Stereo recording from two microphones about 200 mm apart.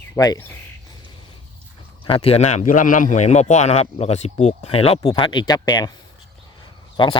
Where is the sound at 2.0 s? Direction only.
30° left (ahead or behind).